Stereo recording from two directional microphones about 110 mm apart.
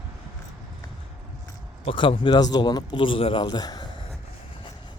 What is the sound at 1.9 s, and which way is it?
Speech, 55° left (ahead or behind).